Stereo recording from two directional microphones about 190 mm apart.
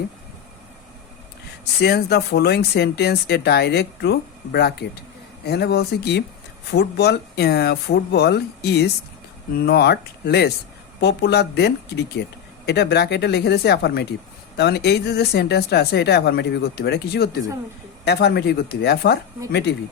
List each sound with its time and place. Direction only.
1.8 s speech: 60° left (ahead or behind)